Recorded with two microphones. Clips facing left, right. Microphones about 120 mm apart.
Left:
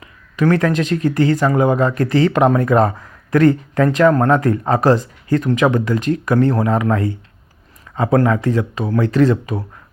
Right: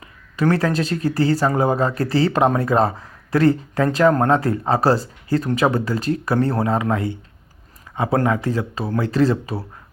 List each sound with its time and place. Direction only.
0.5 s speech: 35° right (ahead or behind)
8.4 s speech: 35° right (ahead or behind)